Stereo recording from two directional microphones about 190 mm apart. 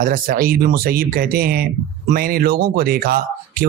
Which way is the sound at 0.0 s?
50° right (ahead or behind).